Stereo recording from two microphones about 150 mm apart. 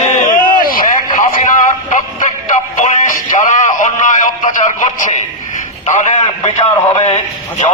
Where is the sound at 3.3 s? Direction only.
55° left (ahead or behind).